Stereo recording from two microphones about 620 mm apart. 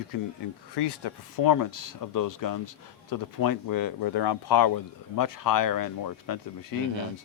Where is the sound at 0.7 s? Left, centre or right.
Left.